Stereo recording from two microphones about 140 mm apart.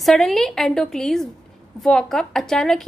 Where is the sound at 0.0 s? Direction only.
Centre (ahead or behind).